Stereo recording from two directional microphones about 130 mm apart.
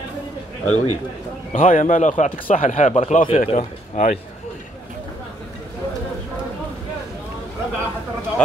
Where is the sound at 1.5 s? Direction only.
75° left (ahead or behind).